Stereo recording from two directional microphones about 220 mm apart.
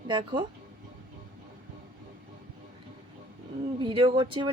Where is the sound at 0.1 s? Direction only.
20° right (ahead or behind).